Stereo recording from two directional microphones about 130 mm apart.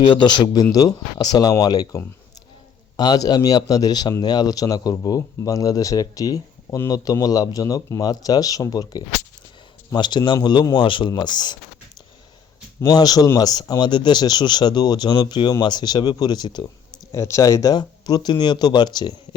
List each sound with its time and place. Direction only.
0.0 s speech: 40° left (ahead or behind)
3.0 s speech: 30° left (ahead or behind)
12.8 s speech: 30° left (ahead or behind)
17.1 s speech: 20° left (ahead or behind)